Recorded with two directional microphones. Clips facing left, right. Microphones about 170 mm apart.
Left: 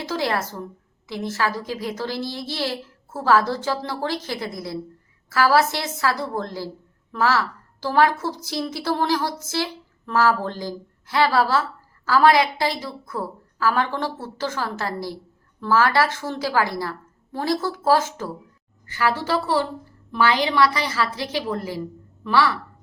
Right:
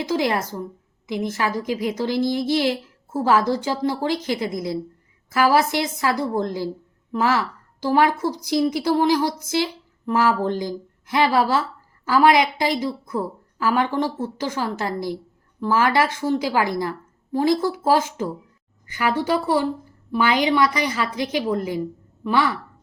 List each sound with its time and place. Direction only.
0.0 s a woman's voice: 15° right (ahead or behind)